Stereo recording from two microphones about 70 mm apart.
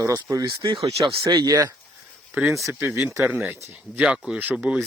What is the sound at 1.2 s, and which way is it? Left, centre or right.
Speech, right.